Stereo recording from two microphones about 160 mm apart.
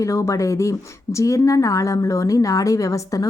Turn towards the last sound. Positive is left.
turn(degrees=20)  # may be behind; listen again after turning